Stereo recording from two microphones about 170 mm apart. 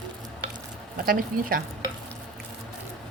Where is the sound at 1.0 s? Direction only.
60° right (ahead or behind).